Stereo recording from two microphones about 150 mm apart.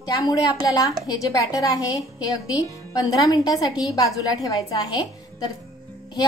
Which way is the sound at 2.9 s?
25° left (ahead or behind).